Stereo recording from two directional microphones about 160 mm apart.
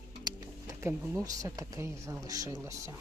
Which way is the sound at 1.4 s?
20° right (ahead or behind).